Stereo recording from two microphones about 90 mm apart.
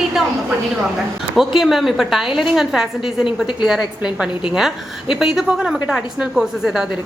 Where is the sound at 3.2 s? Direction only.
65° left (ahead or behind).